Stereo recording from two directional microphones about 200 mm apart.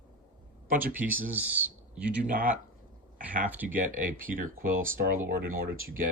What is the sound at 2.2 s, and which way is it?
Speech, 45° right (ahead or behind).